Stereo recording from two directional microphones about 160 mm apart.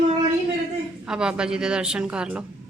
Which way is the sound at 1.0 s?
5° right (ahead or behind).